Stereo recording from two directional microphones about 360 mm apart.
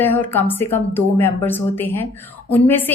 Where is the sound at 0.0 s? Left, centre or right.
Centre.